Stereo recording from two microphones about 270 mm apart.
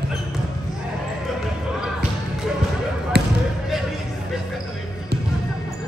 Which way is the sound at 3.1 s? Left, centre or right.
Right.